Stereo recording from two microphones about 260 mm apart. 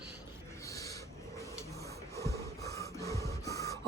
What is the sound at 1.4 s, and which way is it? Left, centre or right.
Printer, centre.